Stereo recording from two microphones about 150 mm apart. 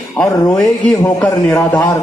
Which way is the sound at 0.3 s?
25° left (ahead or behind).